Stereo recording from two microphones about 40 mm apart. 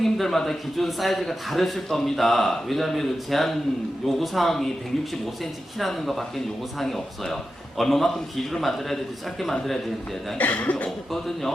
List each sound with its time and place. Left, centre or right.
0.0 s a man's voice: centre
10.3 s speech: left